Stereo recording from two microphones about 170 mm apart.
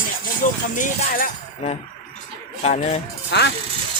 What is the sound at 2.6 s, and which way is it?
Speech, 40° left (ahead or behind).